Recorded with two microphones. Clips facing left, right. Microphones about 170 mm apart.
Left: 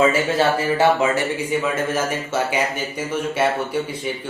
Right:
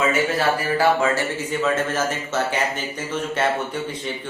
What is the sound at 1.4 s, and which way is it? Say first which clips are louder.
A man's voice: even; 10° left (ahead or behind).